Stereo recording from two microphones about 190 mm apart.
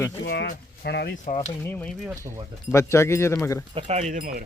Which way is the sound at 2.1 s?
15° right (ahead or behind).